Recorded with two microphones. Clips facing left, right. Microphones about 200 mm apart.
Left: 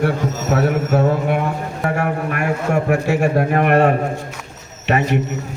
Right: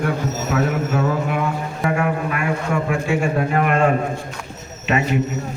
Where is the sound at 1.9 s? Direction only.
45° left (ahead or behind).